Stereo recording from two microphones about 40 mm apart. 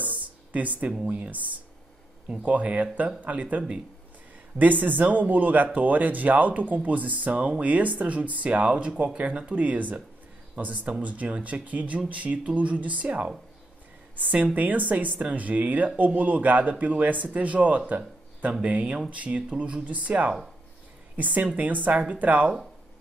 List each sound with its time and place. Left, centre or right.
0.0 s a sound: right
1.0 s speech: right
2.4 s speech: right
14.1 s a woman's voice: right